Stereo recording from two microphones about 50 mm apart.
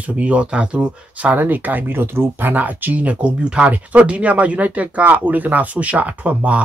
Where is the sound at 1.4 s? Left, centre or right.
Right.